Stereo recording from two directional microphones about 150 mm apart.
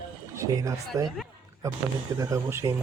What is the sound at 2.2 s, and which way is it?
Speech, 20° right (ahead or behind).